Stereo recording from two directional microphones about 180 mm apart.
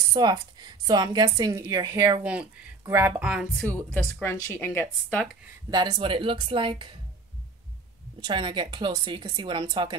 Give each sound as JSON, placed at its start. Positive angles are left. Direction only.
{"t": 0.1, "sound": "a woman's voice", "side_deg": -25}
{"t": 3.9, "sound": "speech", "side_deg": 15}
{"t": 5.7, "sound": "a woman's voice", "side_deg": -25}
{"t": 8.3, "sound": "a woman's voice", "side_deg": -25}